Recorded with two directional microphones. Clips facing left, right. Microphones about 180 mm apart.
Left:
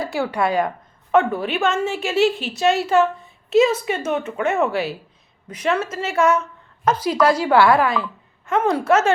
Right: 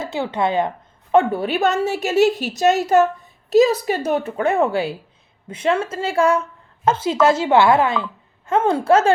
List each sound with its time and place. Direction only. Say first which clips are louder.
0.0 s a woman's voice: even; 20° right (ahead or behind)